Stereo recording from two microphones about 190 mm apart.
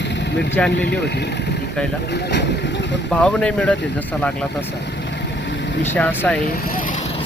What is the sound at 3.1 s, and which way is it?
Speech, 5° left (ahead or behind).